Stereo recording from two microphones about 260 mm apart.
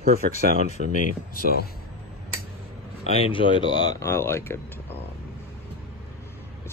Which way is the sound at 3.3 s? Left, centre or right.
Centre.